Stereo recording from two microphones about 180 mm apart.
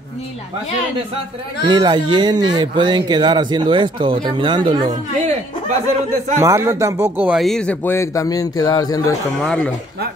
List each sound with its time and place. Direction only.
1.7 s speech: 25° right (ahead or behind)
4.8 s a sound: 40° right (ahead or behind)
6.3 s speech: 15° right (ahead or behind); by 9.1 s 20° left (ahead or behind)
9.4 s speech: 5° left (ahead or behind)